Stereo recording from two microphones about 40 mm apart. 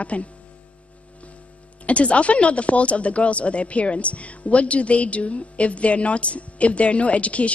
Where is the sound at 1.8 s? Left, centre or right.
Left.